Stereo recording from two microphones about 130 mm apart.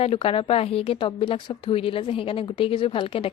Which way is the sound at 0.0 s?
50° left (ahead or behind).